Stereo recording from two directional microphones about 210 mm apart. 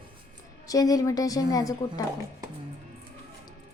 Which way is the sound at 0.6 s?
15° left (ahead or behind).